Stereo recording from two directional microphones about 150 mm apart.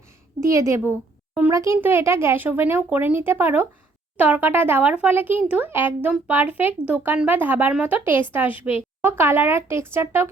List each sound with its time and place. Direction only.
0.4 s a woman's voice: 20° right (ahead or behind)